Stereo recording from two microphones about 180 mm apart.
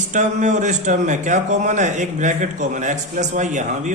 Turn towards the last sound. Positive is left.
turn(degrees=-45)  # may be behind; listen again after turning